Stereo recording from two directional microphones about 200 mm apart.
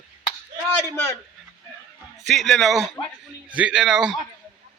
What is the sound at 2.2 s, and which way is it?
A man's voice, centre (ahead or behind).